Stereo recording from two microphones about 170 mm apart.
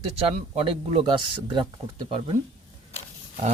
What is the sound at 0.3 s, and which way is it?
Speech, 35° right (ahead or behind).